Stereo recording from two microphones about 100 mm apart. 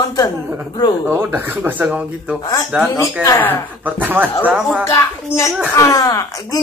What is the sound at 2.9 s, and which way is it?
Speech, 35° left (ahead or behind).